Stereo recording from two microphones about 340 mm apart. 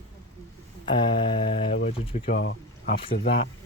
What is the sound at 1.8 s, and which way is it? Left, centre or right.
Speech, centre.